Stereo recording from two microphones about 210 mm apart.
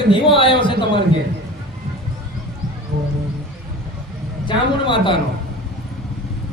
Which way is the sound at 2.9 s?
50° right (ahead or behind).